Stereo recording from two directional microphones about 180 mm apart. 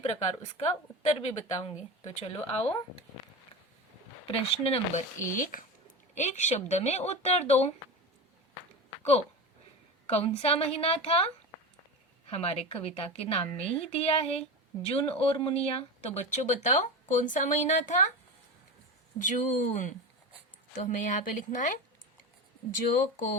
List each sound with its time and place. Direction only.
0.0 s speech: 35° left (ahead or behind)
4.3 s speech: 30° left (ahead or behind)
5.3 s speech: 50° left (ahead or behind)
10.1 s speech: 35° left (ahead or behind)
12.3 s speech: 35° left (ahead or behind)
19.2 s speech: 45° left (ahead or behind)
22.9 s speech: 50° left (ahead or behind)